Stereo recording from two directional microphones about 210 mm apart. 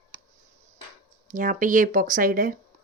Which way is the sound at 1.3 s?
35° right (ahead or behind).